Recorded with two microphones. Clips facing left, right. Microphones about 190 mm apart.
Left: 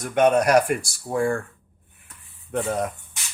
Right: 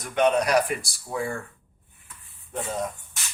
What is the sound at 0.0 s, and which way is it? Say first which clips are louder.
Speech: left 4 dB; 50° left (ahead or behind).